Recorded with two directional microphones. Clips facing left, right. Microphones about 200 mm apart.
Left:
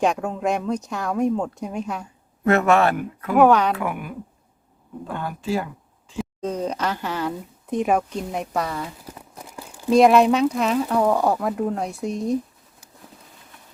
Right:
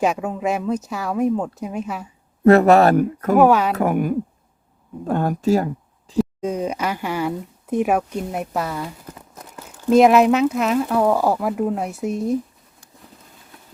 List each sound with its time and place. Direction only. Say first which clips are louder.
0.0 s speech: right 1 dB; 5° right (ahead or behind)
2.4 s speech: right 6 dB; 35° right (ahead or behind)
3.3 s speech: right 1 dB; 5° right (ahead or behind)
3.8 s a woman's voice: right 9 dB; 40° right (ahead or behind)
6.4 s speech: right 2 dB; 10° right (ahead or behind)
9.0 s crumpling: even; 10° left (ahead or behind)
9.9 s speech: right 2 dB; 5° right (ahead or behind)